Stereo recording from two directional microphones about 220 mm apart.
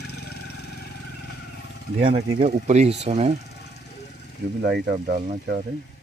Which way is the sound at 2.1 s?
30° right (ahead or behind).